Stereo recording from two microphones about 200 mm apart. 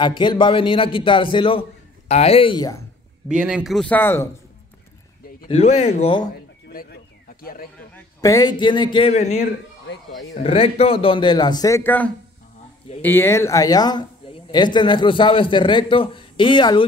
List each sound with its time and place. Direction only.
0.0 s speech: 25° left (ahead or behind)
3.3 s speech: 5° right (ahead or behind); by 4.3 s 10° left (ahead or behind)
5.5 s speech: 30° left (ahead or behind)
6.3 s a sound: 50° left (ahead or behind)
7.9 s speech: 15° left (ahead or behind); by 9.4 s 35° left (ahead or behind)
10.4 s speech: 30° left (ahead or behind)